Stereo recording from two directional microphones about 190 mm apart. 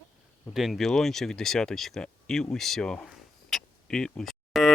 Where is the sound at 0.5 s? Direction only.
Centre (ahead or behind).